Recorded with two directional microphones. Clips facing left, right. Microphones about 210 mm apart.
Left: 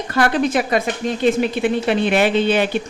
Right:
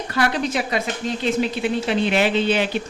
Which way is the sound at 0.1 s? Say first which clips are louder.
Left 5 dB; 50° left (ahead or behind).